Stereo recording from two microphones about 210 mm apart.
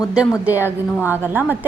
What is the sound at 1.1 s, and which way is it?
Speech, 10° right (ahead or behind).